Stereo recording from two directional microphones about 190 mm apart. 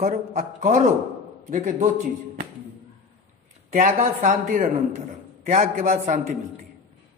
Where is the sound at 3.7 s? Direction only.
40° right (ahead or behind).